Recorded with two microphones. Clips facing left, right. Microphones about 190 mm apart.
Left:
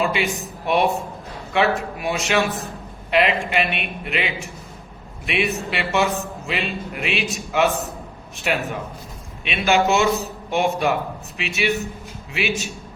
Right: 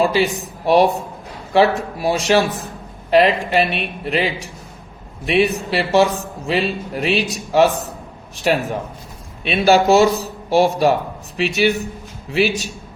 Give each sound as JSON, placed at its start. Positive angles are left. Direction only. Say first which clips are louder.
{"t": 0.0, "sound": "a man's voice", "louder": "right 5 dB", "side_deg": -35}